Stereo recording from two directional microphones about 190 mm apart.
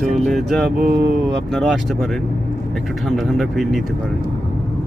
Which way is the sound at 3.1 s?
Centre (ahead or behind).